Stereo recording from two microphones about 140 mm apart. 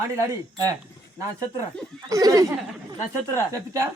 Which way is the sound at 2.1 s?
25° right (ahead or behind).